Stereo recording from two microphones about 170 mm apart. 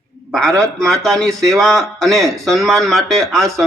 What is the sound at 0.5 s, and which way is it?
Speech, 5° left (ahead or behind).